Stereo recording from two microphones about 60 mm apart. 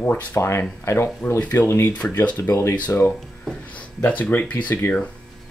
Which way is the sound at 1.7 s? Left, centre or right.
Left.